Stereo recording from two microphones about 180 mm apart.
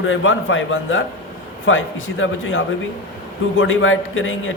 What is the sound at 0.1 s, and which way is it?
A man's voice, 90° left.